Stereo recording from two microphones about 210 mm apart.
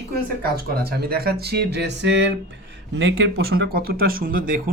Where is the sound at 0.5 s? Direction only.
45° right (ahead or behind).